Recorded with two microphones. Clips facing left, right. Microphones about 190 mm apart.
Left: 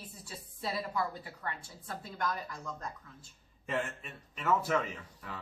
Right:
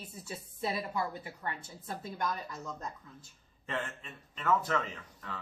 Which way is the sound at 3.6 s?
5° left (ahead or behind).